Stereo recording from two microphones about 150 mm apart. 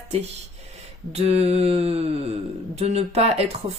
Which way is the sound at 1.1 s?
45° right (ahead or behind).